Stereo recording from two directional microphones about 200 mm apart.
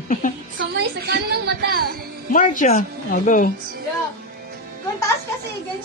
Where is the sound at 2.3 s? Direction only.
40° left (ahead or behind).